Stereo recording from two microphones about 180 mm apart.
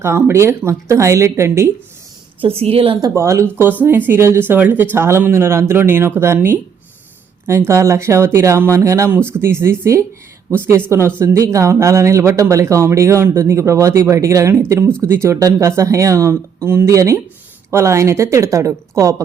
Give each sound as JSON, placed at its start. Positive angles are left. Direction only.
{"t": 0.0, "sound": "speech", "side_deg": -15}
{"t": 2.4, "sound": "a woman's voice", "side_deg": -30}
{"t": 3.2, "sound": "speech", "side_deg": -15}